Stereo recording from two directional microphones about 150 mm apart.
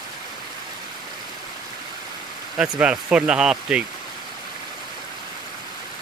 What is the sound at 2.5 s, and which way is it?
Speech, 5° right (ahead or behind).